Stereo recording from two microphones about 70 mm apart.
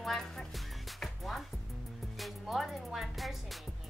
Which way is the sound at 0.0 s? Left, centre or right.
Centre.